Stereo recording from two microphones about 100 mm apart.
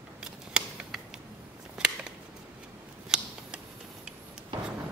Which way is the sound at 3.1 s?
5° right (ahead or behind).